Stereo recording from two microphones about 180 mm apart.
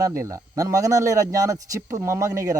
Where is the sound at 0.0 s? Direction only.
15° right (ahead or behind).